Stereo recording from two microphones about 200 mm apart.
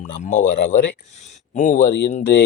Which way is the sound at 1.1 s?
35° left (ahead or behind).